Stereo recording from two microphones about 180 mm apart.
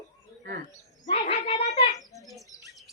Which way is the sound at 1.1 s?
35° left (ahead or behind).